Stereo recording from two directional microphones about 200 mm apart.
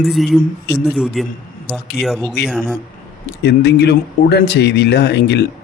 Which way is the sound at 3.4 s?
55° left (ahead or behind).